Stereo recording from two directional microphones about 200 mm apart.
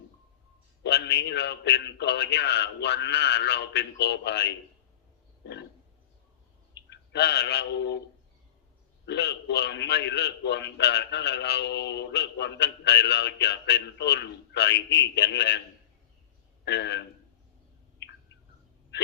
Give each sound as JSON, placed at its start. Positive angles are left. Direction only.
{"t": 0.8, "sound": "a man's voice", "side_deg": 55}
{"t": 5.4, "sound": "a sound", "side_deg": 60}
{"t": 6.9, "sound": "speech", "side_deg": 60}
{"t": 9.0, "sound": "a man's voice", "side_deg": 55}
{"t": 16.6, "sound": "a man's voice", "side_deg": 60}